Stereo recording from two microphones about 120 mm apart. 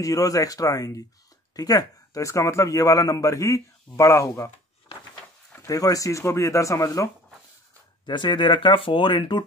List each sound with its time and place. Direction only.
0.0 s a man's voice: 30° left (ahead or behind)
5.5 s a man's voice: 25° left (ahead or behind)
8.0 s speech: 40° left (ahead or behind)